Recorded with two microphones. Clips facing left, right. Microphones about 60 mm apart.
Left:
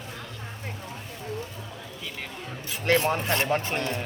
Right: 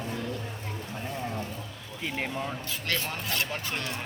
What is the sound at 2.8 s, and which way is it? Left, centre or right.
Speech, left.